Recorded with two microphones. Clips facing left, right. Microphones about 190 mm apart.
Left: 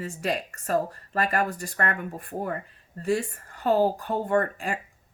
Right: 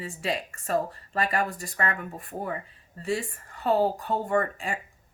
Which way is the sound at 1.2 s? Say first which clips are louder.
Left 2 dB; 55° left (ahead or behind).